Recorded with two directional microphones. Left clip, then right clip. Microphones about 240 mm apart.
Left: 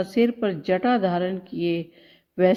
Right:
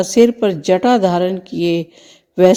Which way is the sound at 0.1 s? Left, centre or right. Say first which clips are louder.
Right 13 dB; right.